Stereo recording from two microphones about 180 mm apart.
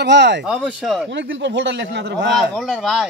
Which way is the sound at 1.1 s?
85° right.